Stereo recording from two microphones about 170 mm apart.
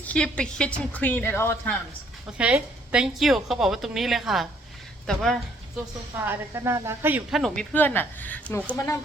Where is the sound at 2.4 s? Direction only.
5° right (ahead or behind).